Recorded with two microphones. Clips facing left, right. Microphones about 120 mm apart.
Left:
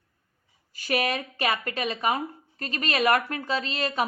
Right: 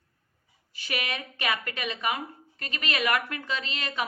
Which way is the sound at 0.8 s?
40° left (ahead or behind).